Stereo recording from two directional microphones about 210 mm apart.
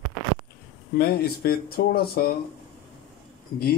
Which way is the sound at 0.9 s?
45° left (ahead or behind).